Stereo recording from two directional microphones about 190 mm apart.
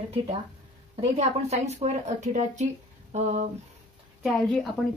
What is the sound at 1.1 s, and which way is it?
Speech, 35° right (ahead or behind).